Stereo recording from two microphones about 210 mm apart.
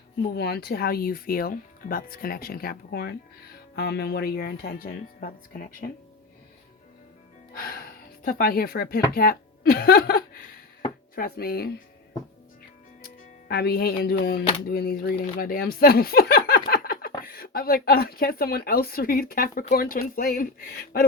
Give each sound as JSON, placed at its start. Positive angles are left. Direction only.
{"t": 0.3, "sound": "speech", "side_deg": 50}
{"t": 7.5, "sound": "speech", "side_deg": 45}
{"t": 13.5, "sound": "speech", "side_deg": 45}